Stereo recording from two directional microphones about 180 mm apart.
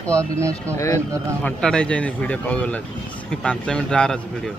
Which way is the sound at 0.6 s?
15° left (ahead or behind).